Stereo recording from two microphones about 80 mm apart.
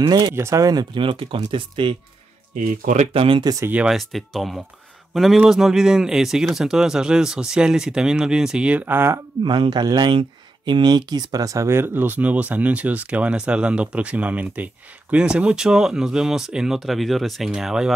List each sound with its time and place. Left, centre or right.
0.0 s speech: right
0.9 s speech: right
3.5 s speech: right
3.9 s speech: centre; by 9.1 s right
9.4 s speech: right; by 17.9 s centre